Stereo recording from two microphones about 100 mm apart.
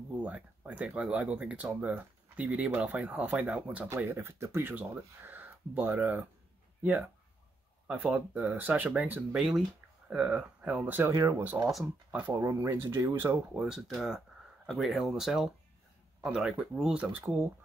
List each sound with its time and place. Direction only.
0.2 s speech: 15° right (ahead or behind)
3.9 s speech: 25° right (ahead or behind)
13.5 s speech: 5° right (ahead or behind)